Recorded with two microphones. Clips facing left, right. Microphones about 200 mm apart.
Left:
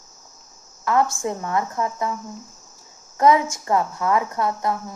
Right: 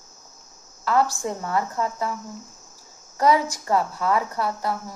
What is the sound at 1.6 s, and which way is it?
Speech, 20° left (ahead or behind).